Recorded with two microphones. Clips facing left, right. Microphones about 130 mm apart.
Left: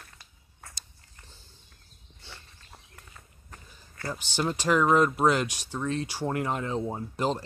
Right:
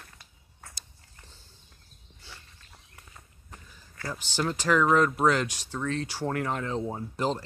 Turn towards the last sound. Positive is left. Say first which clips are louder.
# left 1 dB
turn(degrees=20)  # may be behind; listen again after turning